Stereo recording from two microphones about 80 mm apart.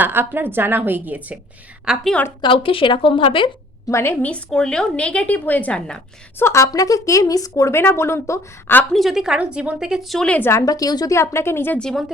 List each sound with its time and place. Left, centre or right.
0.0 s a woman's voice: right
1.9 s a woman's voice: centre
2.4 s a woman's voice: left
3.8 s a woman's voice: left
4.4 s a woman's voice: centre
6.4 s speech: left
7.8 s a woman's voice: left
8.9 s a woman's voice: centre
10.7 s speech: left
11.1 s a woman's voice: left
11.8 s a woman's voice: centre